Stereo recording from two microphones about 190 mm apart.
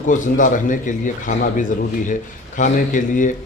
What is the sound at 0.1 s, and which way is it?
A man's voice, 40° left (ahead or behind).